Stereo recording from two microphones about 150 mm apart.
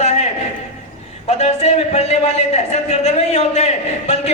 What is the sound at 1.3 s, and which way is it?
A man's voice, 50° left (ahead or behind).